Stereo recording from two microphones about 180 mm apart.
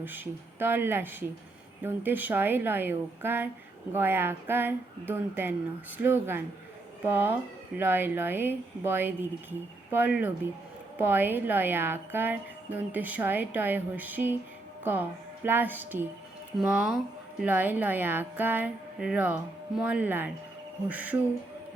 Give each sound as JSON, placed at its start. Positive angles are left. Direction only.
{"t": 0.0, "sound": "a woman's voice", "side_deg": -10}
{"t": 15.4, "sound": "a woman's voice", "side_deg": -10}